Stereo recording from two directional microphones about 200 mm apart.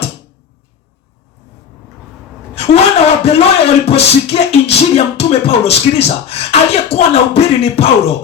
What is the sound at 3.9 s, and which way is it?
Beatboxing, 30° left (ahead or behind).